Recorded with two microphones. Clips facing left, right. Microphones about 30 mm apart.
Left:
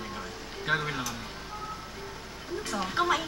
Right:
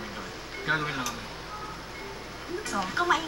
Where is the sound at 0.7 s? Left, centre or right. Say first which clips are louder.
Right 1 dB; centre.